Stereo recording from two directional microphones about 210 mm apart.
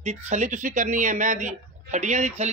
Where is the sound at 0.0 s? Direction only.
35° right (ahead or behind).